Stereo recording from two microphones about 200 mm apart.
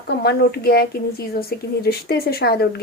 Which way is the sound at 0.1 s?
55° left (ahead or behind).